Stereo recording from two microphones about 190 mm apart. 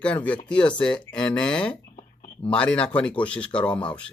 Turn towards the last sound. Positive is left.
turn(degrees=5)  # may be behind; listen again after turning